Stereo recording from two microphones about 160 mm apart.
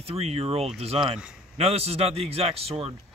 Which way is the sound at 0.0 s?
40° right (ahead or behind).